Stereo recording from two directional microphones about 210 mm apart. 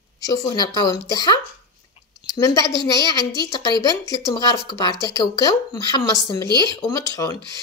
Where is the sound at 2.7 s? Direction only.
20° right (ahead or behind).